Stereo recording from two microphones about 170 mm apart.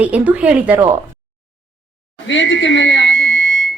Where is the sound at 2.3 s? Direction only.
90° left.